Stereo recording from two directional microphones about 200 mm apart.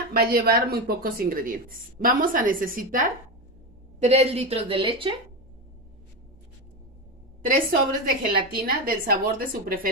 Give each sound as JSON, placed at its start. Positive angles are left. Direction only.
{"t": 0.1, "sound": "speech", "side_deg": -50}
{"t": 7.4, "sound": "speech", "side_deg": -45}